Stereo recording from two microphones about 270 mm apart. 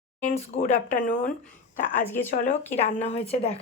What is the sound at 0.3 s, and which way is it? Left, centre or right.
Speech, left.